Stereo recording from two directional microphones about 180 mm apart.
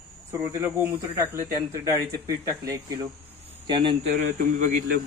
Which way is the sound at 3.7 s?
30° right (ahead or behind).